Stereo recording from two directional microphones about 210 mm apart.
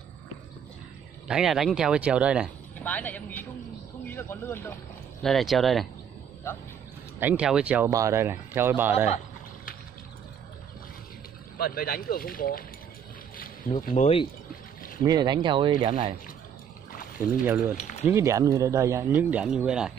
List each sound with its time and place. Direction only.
1.2 s speech: centre (ahead or behind)
2.8 s speech: 5° left (ahead or behind)
7.2 s speech: 5° right (ahead or behind)
11.5 s speech: 45° left (ahead or behind)
13.7 s speech: 35° left (ahead or behind)
15.0 s speech: 20° right (ahead or behind)
17.7 s speech: 35° left (ahead or behind)
18.0 s speech: 15° right (ahead or behind)